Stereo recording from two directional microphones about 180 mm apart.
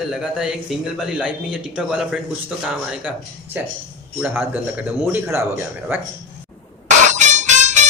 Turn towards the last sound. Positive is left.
turn(degrees=-40)  # may be behind; listen again after turning